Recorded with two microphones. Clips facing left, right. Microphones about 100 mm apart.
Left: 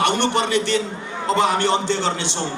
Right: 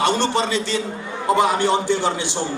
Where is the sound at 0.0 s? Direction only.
65° left (ahead or behind).